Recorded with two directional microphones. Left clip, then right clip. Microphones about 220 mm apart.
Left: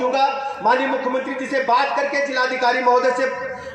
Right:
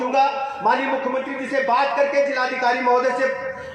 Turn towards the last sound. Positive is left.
turn(degrees=35)  # may be behind; listen again after turning